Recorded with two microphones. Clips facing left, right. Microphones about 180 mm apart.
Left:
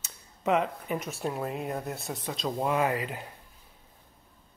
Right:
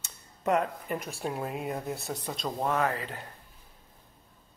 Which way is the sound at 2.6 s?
15° left (ahead or behind).